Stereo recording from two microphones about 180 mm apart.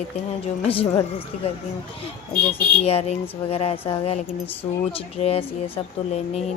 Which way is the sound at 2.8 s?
35° left (ahead or behind).